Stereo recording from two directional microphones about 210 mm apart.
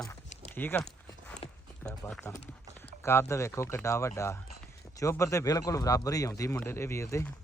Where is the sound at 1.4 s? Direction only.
30° left (ahead or behind).